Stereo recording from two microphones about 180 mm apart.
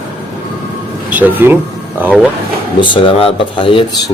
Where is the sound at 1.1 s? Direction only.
10° right (ahead or behind).